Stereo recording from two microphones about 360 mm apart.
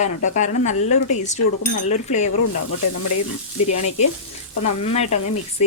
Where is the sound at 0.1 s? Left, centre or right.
Left.